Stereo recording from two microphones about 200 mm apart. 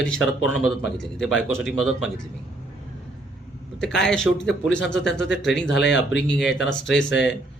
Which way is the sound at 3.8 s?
Centre (ahead or behind).